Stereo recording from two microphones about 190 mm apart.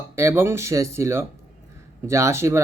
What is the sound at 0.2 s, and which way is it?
Speech, 15° right (ahead or behind).